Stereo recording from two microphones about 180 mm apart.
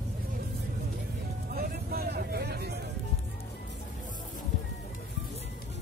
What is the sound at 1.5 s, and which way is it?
Vehicle, 55° right (ahead or behind).